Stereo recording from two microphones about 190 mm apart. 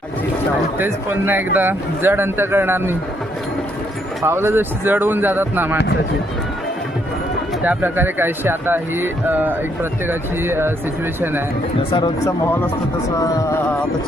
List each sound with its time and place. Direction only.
0.8 s speech: 10° right (ahead or behind)
4.2 s speech: 15° right (ahead or behind)
7.6 s speech: 10° right (ahead or behind)
11.8 s speech: 25° left (ahead or behind)